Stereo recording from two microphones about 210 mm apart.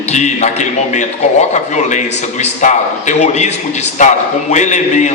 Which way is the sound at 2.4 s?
35° left (ahead or behind).